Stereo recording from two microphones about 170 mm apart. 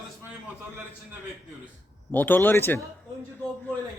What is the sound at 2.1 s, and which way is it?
Speech, 10° left (ahead or behind).